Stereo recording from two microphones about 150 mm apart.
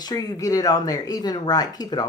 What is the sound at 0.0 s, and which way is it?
Speech, 25° left (ahead or behind).